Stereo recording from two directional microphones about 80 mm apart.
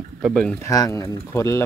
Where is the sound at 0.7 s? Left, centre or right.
Left.